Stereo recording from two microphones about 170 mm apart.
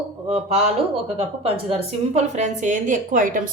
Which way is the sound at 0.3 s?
35° right (ahead or behind).